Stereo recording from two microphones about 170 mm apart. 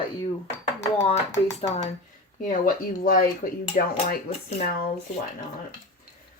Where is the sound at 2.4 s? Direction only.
50° left (ahead or behind).